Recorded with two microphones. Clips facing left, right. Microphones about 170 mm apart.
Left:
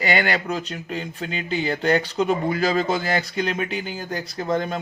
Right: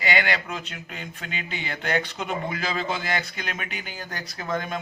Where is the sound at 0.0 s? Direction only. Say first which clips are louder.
Left 4 dB; 40° left (ahead or behind).